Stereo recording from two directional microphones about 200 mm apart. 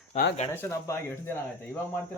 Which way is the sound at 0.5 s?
10° left (ahead or behind).